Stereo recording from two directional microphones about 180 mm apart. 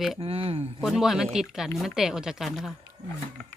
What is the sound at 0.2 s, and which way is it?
Speech, 30° right (ahead or behind).